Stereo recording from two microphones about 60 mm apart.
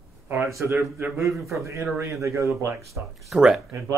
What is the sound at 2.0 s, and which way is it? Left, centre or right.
Speech, right.